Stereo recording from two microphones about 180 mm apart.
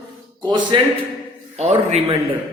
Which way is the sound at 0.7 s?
25° right (ahead or behind).